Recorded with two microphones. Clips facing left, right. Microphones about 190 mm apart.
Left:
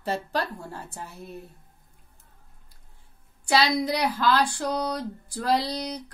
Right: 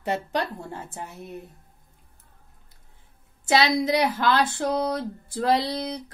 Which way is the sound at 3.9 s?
20° right (ahead or behind).